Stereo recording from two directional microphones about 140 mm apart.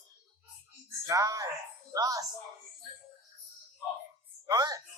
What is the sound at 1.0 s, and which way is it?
Speech, 25° right (ahead or behind).